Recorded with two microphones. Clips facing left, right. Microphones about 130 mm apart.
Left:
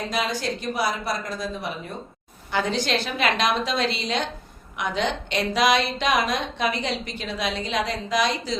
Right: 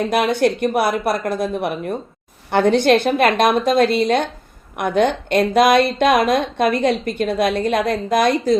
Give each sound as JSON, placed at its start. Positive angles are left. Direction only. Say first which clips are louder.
{"t": 0.0, "sound": "a woman's voice", "louder": "right 10 dB", "side_deg": -60}